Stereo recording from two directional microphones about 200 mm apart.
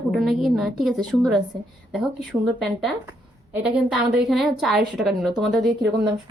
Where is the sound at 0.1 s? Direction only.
Centre (ahead or behind).